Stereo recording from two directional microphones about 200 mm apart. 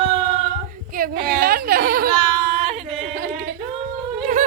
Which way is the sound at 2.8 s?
40° right (ahead or behind).